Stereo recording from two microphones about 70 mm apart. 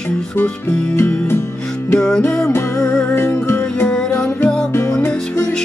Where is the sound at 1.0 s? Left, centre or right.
Left.